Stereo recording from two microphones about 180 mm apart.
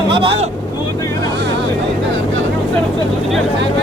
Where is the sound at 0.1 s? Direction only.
30° right (ahead or behind).